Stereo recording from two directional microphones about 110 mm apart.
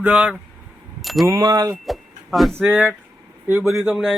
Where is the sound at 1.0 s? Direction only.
Centre (ahead or behind).